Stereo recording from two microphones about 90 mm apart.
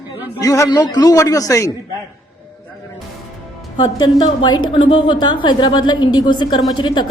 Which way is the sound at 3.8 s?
45° left (ahead or behind).